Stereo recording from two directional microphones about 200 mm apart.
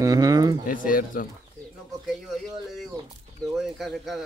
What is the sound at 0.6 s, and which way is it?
Speech, 45° left (ahead or behind).